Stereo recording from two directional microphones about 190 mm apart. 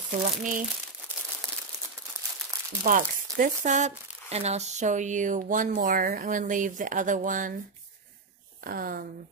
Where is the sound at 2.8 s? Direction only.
45° right (ahead or behind).